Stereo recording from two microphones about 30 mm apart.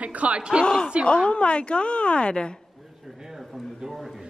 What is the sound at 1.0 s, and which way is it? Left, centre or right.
A woman's voice, left.